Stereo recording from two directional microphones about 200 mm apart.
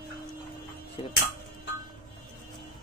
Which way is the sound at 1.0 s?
30° left (ahead or behind).